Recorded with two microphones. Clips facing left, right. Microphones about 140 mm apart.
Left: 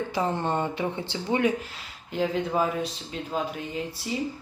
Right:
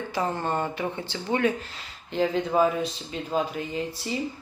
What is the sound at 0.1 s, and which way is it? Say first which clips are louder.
Speech: right 2 dB; 20° left (ahead or behind).